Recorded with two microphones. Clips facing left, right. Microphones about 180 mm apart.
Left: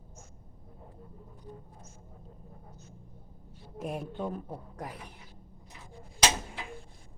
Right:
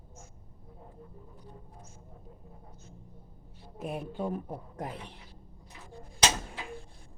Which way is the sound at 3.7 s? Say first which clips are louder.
Even; centre (ahead or behind).